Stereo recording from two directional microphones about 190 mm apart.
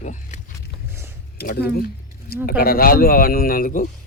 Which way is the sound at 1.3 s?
55° left (ahead or behind).